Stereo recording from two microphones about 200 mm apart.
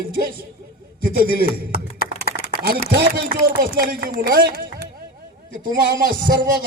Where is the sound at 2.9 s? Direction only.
50° right (ahead or behind).